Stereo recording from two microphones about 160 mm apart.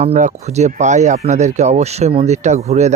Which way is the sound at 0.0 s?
45° right (ahead or behind).